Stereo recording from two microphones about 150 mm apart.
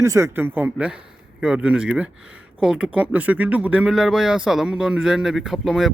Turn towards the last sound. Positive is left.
turn(degrees=0)  # may be behind; listen again after turning